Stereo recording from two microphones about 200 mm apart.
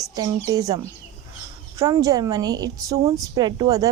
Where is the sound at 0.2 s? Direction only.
20° right (ahead or behind).